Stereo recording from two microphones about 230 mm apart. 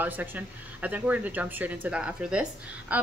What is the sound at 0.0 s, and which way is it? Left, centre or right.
A woman's voice, centre.